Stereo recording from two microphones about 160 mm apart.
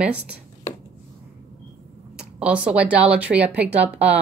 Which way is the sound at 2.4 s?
5° right (ahead or behind).